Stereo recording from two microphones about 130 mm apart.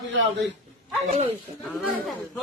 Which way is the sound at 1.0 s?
60° right (ahead or behind).